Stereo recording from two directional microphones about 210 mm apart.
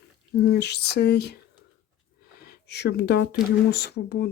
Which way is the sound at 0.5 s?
50° left (ahead or behind).